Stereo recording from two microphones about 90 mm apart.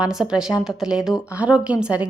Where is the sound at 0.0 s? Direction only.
5° right (ahead or behind).